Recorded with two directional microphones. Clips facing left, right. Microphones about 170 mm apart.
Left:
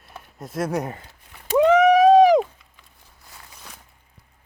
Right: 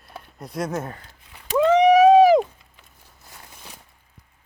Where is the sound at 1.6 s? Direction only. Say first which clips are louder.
Left 1 dB; 10° left (ahead or behind).